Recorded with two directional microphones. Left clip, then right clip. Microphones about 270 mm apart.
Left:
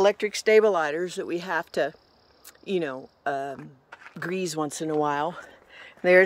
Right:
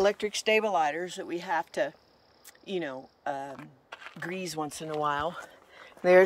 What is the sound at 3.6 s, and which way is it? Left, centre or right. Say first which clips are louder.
Typing: left 1 dB; right.